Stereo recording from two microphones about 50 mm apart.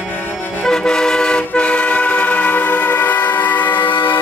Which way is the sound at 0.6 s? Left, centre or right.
Centre.